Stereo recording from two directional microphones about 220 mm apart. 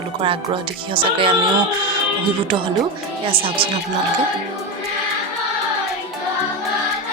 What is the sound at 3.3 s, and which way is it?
Speech, 25° right (ahead or behind).